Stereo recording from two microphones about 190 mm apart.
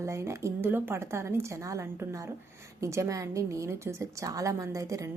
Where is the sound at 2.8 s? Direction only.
15° right (ahead or behind).